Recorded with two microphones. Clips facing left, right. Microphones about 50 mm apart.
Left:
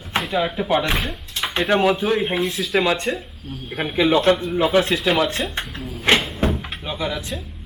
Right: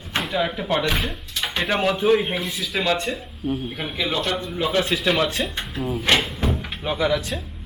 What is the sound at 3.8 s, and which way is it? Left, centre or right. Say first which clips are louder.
Speech: left 11 dB; centre.